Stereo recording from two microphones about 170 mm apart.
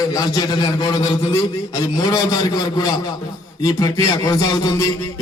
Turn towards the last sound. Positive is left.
turn(degrees=20)  # may be behind; listen again after turning